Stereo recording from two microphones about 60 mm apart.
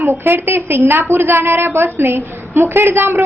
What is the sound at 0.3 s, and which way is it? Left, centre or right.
A woman's voice, right.